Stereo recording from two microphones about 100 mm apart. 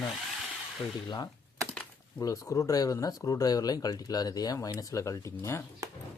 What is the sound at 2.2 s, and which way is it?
Speech, 35° left (ahead or behind).